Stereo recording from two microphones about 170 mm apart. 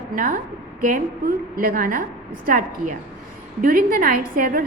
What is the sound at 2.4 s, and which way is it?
A woman's voice, 55° right (ahead or behind).